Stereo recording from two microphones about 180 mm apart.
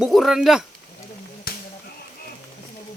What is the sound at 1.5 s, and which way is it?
Whip, 55° left (ahead or behind).